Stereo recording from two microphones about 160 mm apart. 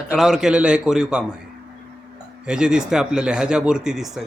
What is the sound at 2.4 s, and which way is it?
Speech, 5° right (ahead or behind).